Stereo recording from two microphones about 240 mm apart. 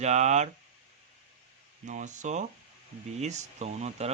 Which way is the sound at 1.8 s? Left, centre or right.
Right.